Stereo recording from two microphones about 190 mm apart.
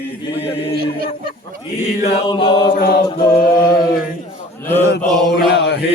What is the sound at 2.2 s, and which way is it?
Chant, 25° left (ahead or behind).